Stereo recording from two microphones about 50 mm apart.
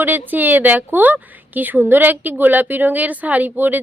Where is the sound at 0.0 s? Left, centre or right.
Right.